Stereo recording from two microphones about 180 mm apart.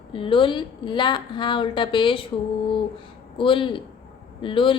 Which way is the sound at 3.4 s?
30° left (ahead or behind).